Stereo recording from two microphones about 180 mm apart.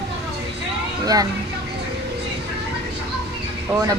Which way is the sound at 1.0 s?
20° right (ahead or behind).